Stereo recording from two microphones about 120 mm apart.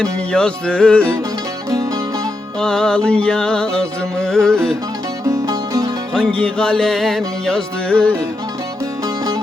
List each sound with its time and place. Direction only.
0.0 s music: 10° left (ahead or behind)
2.6 s music: 5° left (ahead or behind)
5.2 s music: 30° right (ahead or behind)
6.1 s music: 10° left (ahead or behind)